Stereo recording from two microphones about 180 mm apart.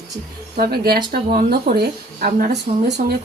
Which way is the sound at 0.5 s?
55° right (ahead or behind).